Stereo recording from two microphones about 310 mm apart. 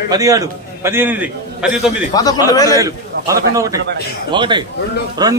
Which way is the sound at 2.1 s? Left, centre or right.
Centre.